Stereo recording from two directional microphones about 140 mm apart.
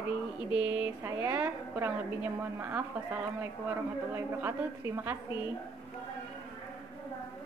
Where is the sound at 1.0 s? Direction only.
15° right (ahead or behind).